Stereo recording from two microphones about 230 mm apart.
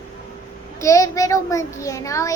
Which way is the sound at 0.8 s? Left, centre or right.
Centre.